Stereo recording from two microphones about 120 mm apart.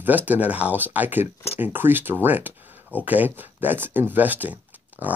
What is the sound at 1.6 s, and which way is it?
Speech, 15° right (ahead or behind).